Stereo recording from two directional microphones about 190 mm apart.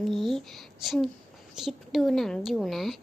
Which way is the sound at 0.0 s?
Centre (ahead or behind).